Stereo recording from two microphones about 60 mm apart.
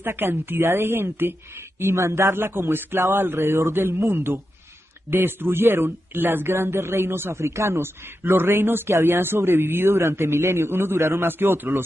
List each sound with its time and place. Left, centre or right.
0.0 s a man's voice: right
2.0 s a man's voice: right
3.0 s a man's voice: right
5.1 s a man's voice: right
8.2 s a man's voice: right